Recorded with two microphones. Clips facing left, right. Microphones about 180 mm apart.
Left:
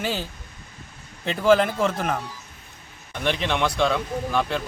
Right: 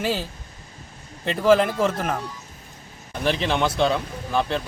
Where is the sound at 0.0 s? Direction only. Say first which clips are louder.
Right 3 dB; centre (ahead or behind).